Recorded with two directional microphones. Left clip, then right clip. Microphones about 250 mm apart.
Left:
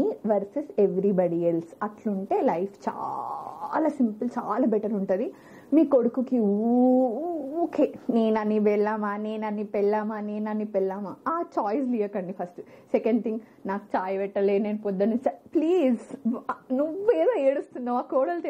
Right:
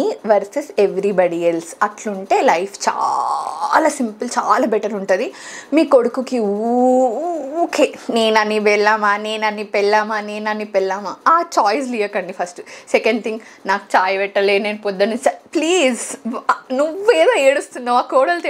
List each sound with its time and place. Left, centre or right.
0.0 s a woman's voice: centre
3.0 s cat: centre
3.7 s a woman's voice: centre
6.4 s cat: right
7.7 s a woman's voice: centre